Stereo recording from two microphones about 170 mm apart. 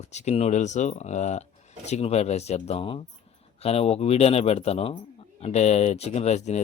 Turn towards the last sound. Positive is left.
turn(degrees=40)  # may be behind; listen again after turning